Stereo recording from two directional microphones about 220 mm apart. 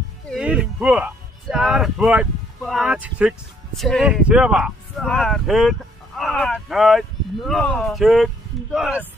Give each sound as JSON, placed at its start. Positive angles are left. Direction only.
{"t": 0.3, "sound": "speech", "side_deg": -5}